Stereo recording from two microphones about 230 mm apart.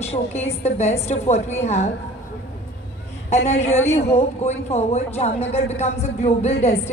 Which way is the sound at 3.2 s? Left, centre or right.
Left.